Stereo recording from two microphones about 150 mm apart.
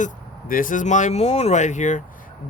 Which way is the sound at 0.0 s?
65° left (ahead or behind).